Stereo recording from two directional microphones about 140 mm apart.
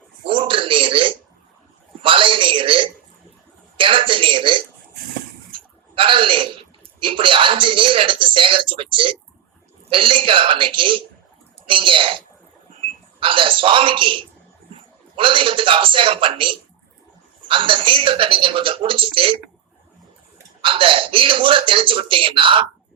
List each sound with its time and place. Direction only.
0.3 s a man's voice: 40° right (ahead or behind)
20.6 s speech: 40° right (ahead or behind)